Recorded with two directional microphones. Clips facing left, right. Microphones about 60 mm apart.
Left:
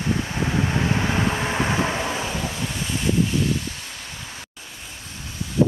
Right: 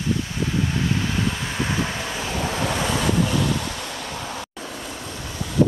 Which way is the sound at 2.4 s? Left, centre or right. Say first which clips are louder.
Right 5 dB; right.